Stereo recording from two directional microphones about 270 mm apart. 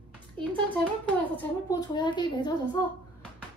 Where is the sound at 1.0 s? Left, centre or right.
Centre.